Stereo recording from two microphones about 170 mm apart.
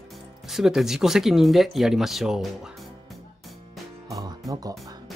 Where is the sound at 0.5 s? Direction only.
Centre (ahead or behind).